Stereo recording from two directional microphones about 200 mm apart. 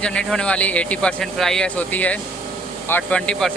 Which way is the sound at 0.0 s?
5° left (ahead or behind).